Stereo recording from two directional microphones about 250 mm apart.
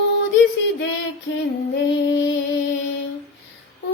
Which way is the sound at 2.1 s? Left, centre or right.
Left.